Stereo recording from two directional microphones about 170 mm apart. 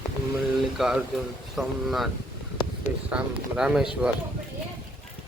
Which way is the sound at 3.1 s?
5° right (ahead or behind).